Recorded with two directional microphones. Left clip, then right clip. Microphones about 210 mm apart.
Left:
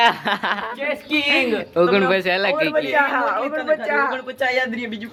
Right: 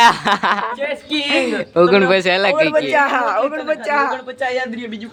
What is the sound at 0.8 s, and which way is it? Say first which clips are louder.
Speech: even; 5° left (ahead or behind).